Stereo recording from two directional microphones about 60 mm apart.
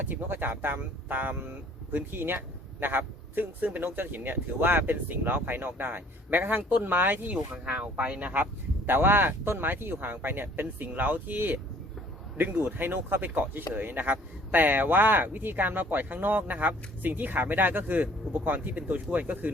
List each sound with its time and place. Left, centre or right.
0.0 s speech: right
7.3 s speech: centre